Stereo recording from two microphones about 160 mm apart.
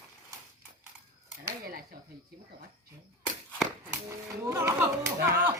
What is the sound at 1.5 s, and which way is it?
Speech, 65° right (ahead or behind).